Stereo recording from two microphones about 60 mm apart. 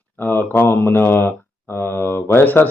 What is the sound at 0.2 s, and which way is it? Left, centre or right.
Speech, left.